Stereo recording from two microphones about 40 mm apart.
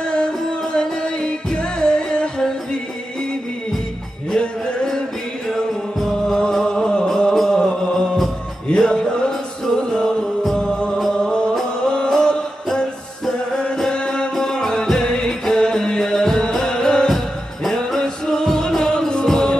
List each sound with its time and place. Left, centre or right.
0.0 s music: left
4.3 s music: centre
6.2 s music: centre
13.9 s music: left